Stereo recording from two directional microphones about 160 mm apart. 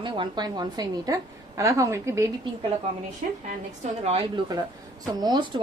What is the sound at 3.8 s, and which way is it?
Speech, 40° right (ahead or behind).